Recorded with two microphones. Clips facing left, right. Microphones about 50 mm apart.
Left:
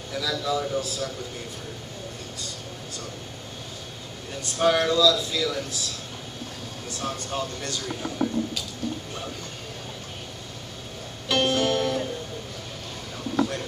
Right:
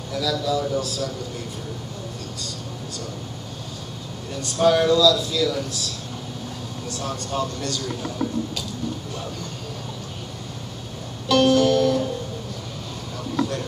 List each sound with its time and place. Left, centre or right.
0.1 s speech: centre
4.4 s speech: centre
7.3 s speech: left
11.2 s music: left